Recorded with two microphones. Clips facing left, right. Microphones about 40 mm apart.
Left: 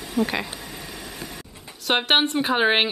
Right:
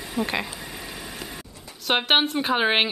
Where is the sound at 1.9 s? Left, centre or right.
Centre.